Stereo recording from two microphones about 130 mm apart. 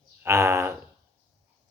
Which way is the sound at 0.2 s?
20° right (ahead or behind).